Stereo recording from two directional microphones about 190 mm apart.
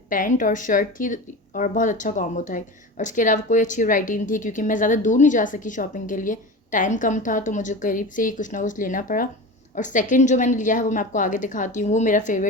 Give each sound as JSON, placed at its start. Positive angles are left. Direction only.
{"t": 0.1, "sound": "a woman's voice", "side_deg": 45}